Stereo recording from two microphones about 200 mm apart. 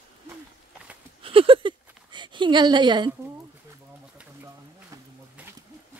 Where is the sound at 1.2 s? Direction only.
25° right (ahead or behind).